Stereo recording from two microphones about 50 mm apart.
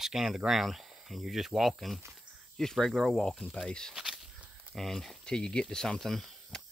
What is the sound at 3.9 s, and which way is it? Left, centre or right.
Walk, centre.